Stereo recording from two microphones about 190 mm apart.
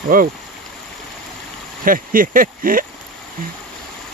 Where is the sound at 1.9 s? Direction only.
45° right (ahead or behind).